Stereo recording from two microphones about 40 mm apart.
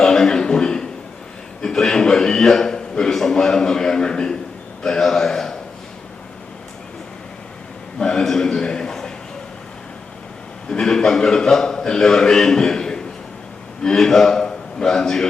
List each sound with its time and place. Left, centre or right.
0.0 s a sound: centre
1.6 s a man's voice: centre
7.9 s a man's voice: centre
10.7 s a man's voice: centre